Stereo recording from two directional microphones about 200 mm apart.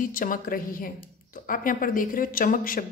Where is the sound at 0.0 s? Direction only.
45° left (ahead or behind).